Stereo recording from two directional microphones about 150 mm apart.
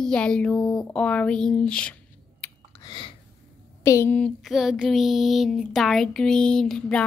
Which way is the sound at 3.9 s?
15° left (ahead or behind).